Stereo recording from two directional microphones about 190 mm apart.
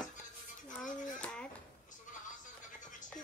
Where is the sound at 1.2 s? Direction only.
5° left (ahead or behind).